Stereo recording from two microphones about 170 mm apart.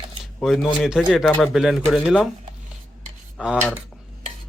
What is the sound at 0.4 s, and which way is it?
A man's voice, centre (ahead or behind).